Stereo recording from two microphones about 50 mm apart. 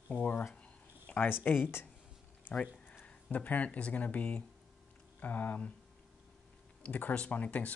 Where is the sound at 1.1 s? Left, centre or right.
Left.